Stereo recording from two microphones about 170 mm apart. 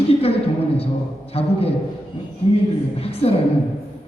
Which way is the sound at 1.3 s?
35° left (ahead or behind).